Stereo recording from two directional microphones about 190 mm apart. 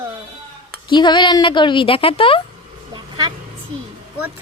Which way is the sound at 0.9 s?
25° left (ahead or behind).